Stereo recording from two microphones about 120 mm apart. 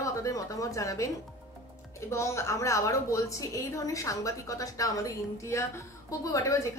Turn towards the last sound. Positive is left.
turn(degrees=25)  # may be behind; listen again after turning